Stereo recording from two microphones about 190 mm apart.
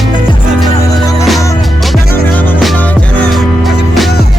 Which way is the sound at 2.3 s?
10° left (ahead or behind).